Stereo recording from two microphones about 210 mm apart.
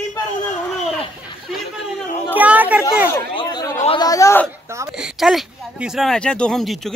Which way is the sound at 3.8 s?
20° left (ahead or behind).